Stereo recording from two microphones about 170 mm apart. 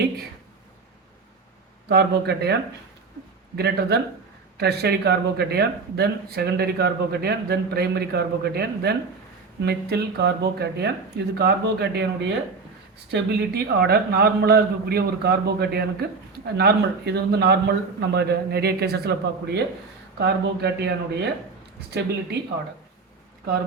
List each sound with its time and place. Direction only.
1.9 s speech: 70° right (ahead or behind)